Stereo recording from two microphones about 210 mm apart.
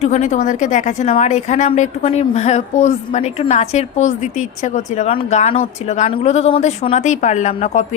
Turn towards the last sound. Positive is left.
turn(degrees=30)  # may be behind; listen again after turning